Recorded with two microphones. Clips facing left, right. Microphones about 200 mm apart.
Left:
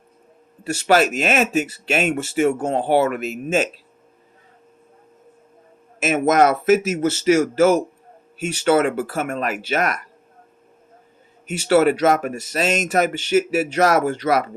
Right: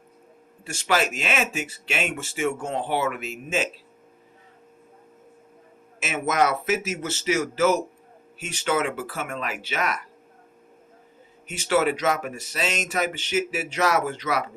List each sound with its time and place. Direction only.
0.8 s speech: 40° left (ahead or behind)
6.0 s speech: 45° left (ahead or behind)
11.4 s speech: 45° left (ahead or behind)